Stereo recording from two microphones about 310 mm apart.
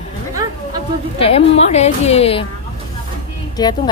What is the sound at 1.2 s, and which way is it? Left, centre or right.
A woman's voice, centre.